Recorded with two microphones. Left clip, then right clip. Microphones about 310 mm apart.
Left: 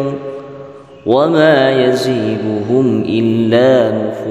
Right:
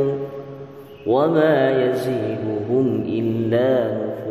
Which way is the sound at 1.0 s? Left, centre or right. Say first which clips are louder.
Left 7 dB; left.